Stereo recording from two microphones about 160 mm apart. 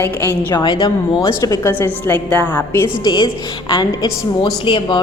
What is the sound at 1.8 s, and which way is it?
Speech, 10° left (ahead or behind).